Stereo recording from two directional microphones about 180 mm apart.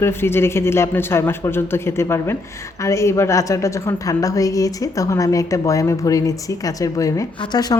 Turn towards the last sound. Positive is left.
turn(degrees=20)  # may be behind; listen again after turning